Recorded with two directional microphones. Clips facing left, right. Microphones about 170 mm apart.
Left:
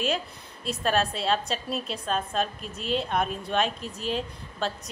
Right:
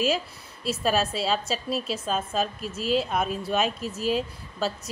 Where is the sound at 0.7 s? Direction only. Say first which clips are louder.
Right 1 dB; 5° right (ahead or behind).